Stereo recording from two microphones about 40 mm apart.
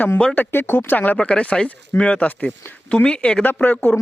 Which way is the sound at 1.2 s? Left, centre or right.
Left.